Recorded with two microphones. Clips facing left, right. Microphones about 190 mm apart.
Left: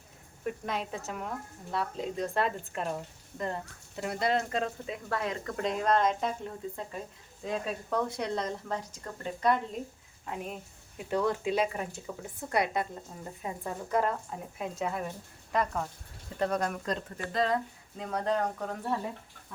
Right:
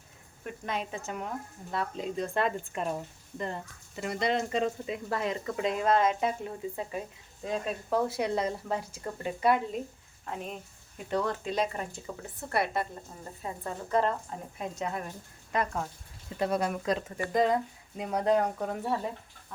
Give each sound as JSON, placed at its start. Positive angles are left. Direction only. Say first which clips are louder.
{"t": 0.4, "sound": "speech", "louder": "left 1 dB", "side_deg": 0}
{"t": 10.2, "sound": "speech", "louder": "even", "side_deg": 5}
{"t": 12.5, "sound": "speech", "louder": "even", "side_deg": 15}